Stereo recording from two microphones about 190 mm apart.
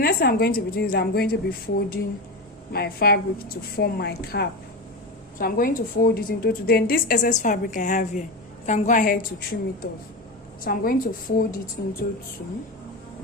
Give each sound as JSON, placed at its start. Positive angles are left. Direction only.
{"t": 0.0, "sound": "a woman's voice", "side_deg": 55}